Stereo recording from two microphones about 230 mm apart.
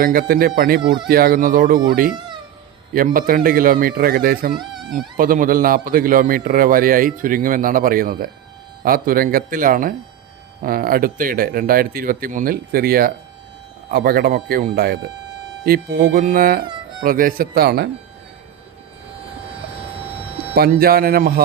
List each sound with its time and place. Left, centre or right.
0.0 s a man's voice: right
0.8 s speech: centre
1.0 s a man's voice: right
2.9 s a man's voice: right
20.6 s a man's voice: right